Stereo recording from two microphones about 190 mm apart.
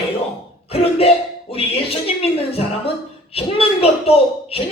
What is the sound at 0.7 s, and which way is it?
Speech, 30° left (ahead or behind).